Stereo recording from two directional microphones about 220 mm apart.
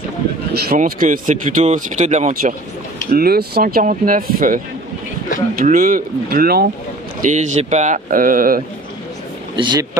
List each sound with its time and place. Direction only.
0.5 s speech: 45° right (ahead or behind)
5.6 s speech: 40° right (ahead or behind)
9.6 s speech: 20° right (ahead or behind)